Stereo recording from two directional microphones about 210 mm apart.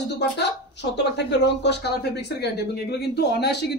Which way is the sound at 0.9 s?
55° left (ahead or behind).